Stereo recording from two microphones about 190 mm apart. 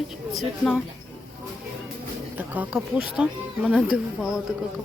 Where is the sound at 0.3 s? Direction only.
Centre (ahead or behind).